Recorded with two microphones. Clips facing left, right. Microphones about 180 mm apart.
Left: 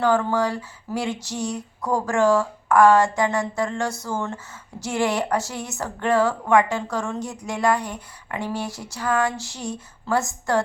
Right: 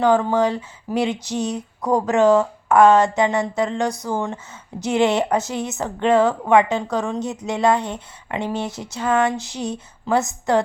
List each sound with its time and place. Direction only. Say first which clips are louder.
0.0 s a woman's voice: right 4 dB; 20° right (ahead or behind)